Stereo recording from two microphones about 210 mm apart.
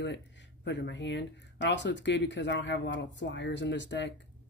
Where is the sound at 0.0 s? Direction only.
55° left (ahead or behind).